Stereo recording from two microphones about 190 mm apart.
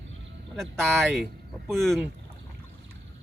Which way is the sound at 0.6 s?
Centre (ahead or behind).